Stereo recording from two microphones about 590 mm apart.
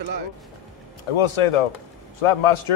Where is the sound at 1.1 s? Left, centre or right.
Left.